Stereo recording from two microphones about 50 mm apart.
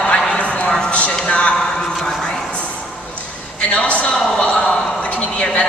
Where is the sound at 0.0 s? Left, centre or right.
Centre.